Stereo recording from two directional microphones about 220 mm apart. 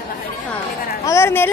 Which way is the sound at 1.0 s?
10° left (ahead or behind).